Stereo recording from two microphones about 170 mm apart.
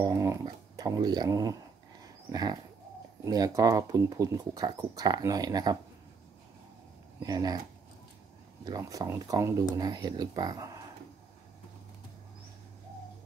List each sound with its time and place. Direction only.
0.0 s speech: 20° right (ahead or behind)
7.2 s speech: 20° right (ahead or behind)
8.6 s speech: 20° right (ahead or behind)